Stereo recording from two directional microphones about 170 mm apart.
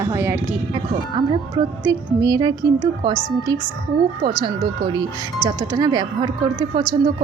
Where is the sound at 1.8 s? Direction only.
25° right (ahead or behind).